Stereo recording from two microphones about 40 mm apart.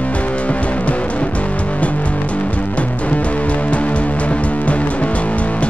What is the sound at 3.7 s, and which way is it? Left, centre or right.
Music, left.